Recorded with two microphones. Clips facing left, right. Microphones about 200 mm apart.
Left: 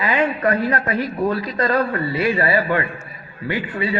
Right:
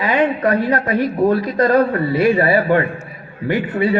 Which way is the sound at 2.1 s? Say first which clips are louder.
Right 7 dB; 55° right (ahead or behind).